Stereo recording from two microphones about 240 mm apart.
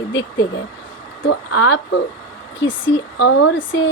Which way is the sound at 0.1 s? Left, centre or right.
Left.